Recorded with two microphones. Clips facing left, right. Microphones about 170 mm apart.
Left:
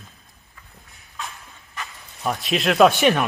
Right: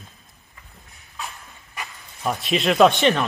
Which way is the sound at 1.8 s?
10° right (ahead or behind).